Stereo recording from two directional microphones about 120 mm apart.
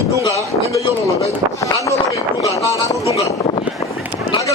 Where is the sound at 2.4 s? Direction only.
30° left (ahead or behind).